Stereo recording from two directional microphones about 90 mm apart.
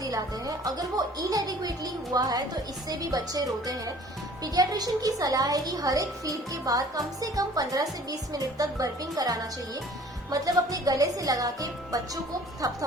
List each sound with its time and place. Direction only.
0.0 s a woman's voice: 45° right (ahead or behind)